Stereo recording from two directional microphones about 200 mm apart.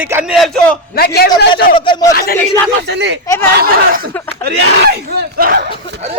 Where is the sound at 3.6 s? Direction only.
45° right (ahead or behind).